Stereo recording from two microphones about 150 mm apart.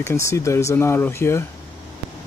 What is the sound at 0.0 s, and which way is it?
Speech, 20° left (ahead or behind).